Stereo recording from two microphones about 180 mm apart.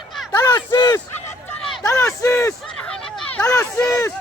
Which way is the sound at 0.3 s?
20° left (ahead or behind).